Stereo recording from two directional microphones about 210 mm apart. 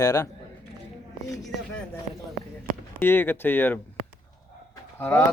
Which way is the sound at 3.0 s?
10° left (ahead or behind).